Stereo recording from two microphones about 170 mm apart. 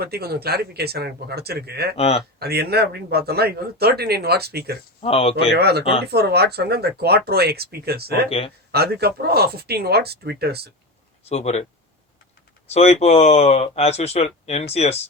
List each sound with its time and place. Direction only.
0.0 s speech: 65° right (ahead or behind)
2.0 s speech: 35° left (ahead or behind)
2.4 s speech: 70° right (ahead or behind)
4.9 s speech: 35° left (ahead or behind)
5.5 s speech: 70° right (ahead or behind)
5.8 s speech: 35° left (ahead or behind)
6.1 s speech: 70° right (ahead or behind)
8.3 s speech: 35° left (ahead or behind)
8.7 s speech: 65° right (ahead or behind)
11.3 s speech: 40° left (ahead or behind)
12.7 s speech: 40° left (ahead or behind)